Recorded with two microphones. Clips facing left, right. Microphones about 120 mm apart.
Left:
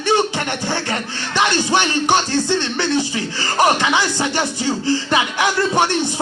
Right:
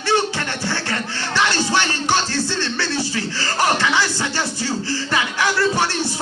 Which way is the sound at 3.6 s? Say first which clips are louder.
Left 3 dB; 20° left (ahead or behind).